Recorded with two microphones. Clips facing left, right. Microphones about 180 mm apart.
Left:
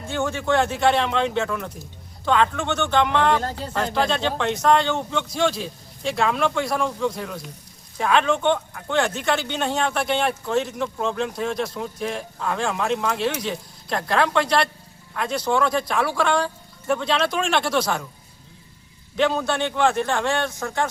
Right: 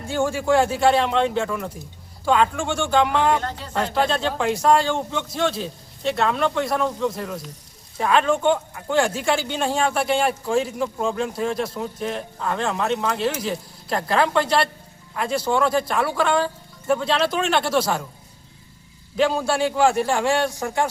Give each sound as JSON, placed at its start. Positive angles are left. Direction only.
{"t": 0.1, "sound": "speech", "side_deg": -10}
{"t": 19.1, "sound": "speech", "side_deg": -5}